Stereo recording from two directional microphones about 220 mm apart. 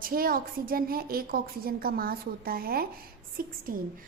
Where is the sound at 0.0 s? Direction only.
40° right (ahead or behind).